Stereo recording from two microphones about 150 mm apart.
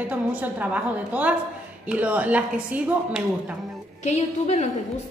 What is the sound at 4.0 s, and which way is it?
Speech, 50° left (ahead or behind).